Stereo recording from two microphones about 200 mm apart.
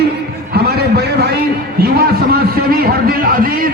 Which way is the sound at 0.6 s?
55° right (ahead or behind).